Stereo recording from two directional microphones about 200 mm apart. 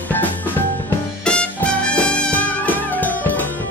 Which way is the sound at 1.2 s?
5° left (ahead or behind).